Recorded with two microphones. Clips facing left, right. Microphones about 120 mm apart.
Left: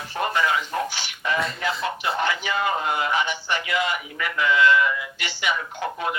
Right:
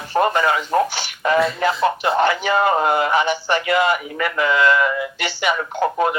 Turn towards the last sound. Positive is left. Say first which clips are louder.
# right 9 dB
turn(degrees=-45)  # may be behind; listen again after turning